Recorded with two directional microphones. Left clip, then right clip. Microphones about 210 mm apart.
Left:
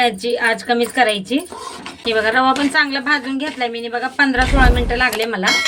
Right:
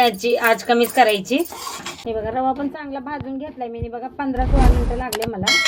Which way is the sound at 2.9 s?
55° left (ahead or behind).